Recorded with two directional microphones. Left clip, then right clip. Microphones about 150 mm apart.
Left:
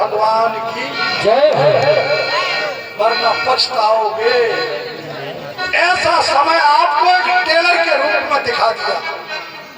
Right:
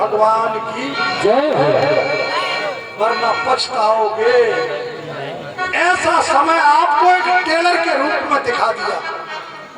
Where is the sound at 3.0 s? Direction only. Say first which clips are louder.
Left 1 dB; 50° right (ahead or behind).